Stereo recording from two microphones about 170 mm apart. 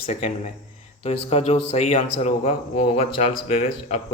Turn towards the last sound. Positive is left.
turn(degrees=35)  # may be behind; listen again after turning